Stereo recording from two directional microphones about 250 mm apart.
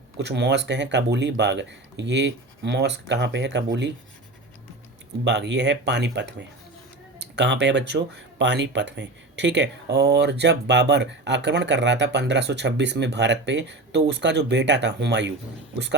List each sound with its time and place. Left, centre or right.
0.2 s speech: right
5.2 s speech: right